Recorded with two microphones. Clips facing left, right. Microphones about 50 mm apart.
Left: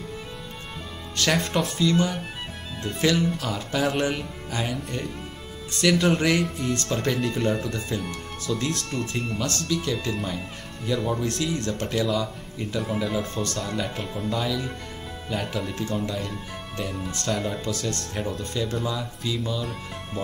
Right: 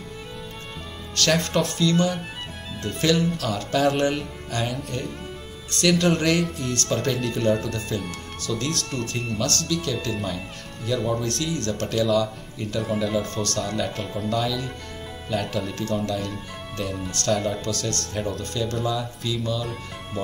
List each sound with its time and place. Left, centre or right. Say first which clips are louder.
1.1 s speech: right 2 dB; centre
9.7 s speech: even; centre
17.6 s speech: right 1 dB; centre
18.1 s speech: right 2 dB; centre
18.4 s speech: right 1 dB; centre